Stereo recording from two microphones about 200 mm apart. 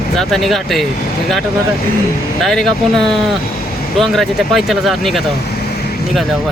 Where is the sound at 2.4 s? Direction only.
Centre (ahead or behind).